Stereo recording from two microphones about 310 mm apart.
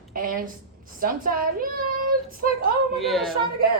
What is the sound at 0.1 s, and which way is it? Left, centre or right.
A child's voice, right.